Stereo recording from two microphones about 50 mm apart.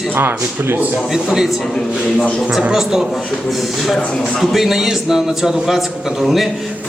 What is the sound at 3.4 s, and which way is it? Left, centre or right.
A man's voice, centre.